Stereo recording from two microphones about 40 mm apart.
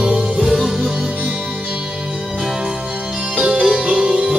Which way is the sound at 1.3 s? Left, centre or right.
Centre.